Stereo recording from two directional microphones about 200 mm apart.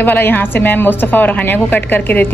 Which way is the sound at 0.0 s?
10° left (ahead or behind).